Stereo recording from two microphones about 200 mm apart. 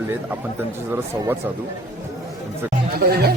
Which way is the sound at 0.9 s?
10° right (ahead or behind).